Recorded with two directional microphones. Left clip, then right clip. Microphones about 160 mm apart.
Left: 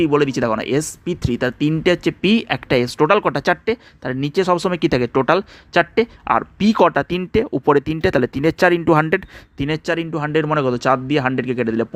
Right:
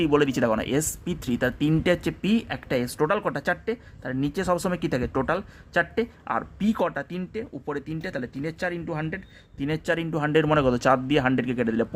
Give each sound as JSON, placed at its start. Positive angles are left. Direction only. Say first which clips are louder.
{"t": 0.0, "sound": "a man's voice", "louder": "left 5 dB", "side_deg": 20}
{"t": 9.6, "sound": "a man's voice", "louder": "left 5 dB", "side_deg": 35}